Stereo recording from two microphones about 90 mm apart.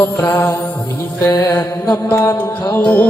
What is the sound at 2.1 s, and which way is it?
Mantra, 25° left (ahead or behind).